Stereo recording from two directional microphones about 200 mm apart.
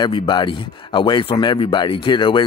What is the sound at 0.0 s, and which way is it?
Speech, 25° left (ahead or behind).